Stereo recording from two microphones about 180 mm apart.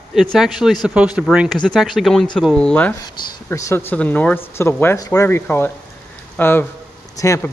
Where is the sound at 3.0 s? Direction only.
15° left (ahead or behind).